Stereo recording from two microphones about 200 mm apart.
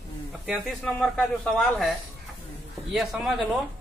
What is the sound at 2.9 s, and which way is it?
Speech, centre (ahead or behind).